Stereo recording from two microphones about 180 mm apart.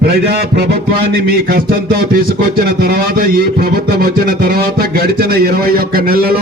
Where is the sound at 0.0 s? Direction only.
60° right (ahead or behind).